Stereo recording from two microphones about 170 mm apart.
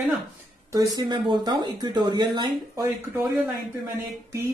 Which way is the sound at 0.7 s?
20° right (ahead or behind).